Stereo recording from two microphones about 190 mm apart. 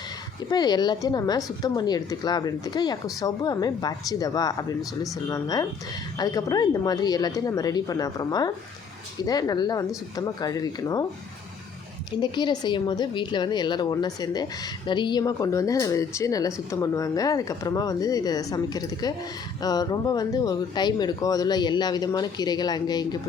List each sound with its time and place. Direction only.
0.5 s a woman's voice: 20° left (ahead or behind)
12.2 s a woman's voice: 25° left (ahead or behind)